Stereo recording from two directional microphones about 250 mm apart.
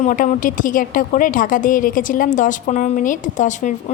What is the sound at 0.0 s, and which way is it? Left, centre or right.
A woman's voice, left.